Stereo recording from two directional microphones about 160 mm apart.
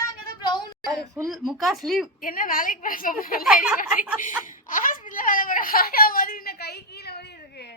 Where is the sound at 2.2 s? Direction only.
60° left (ahead or behind).